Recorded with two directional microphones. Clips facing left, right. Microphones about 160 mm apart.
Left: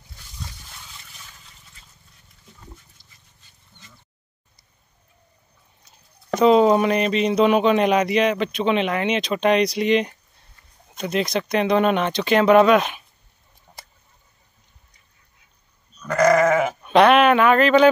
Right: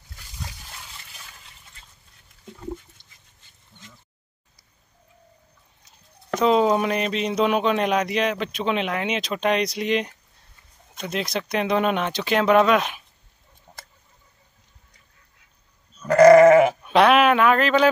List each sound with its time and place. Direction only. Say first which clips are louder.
6.3 s speech: left 4 dB; centre (ahead or behind)
16.0 s goat: right 6 dB; 30° right (ahead or behind)
16.8 s speech: left 2 dB; centre (ahead or behind)